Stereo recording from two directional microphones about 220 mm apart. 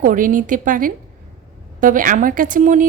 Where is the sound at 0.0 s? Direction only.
35° right (ahead or behind).